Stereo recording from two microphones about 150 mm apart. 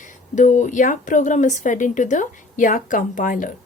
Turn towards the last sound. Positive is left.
turn(degrees=60)  # may be behind; listen again after turning